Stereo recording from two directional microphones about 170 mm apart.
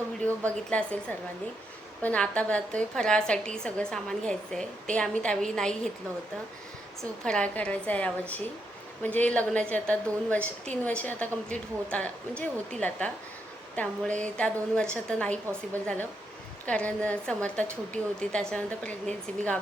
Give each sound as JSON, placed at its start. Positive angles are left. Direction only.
{"t": 0.3, "sound": "a woman's voice", "side_deg": 10}
{"t": 7.3, "sound": "a woman's voice", "side_deg": 5}
{"t": 15.5, "sound": "a woman's voice", "side_deg": -20}
{"t": 16.6, "sound": "a woman's voice", "side_deg": 5}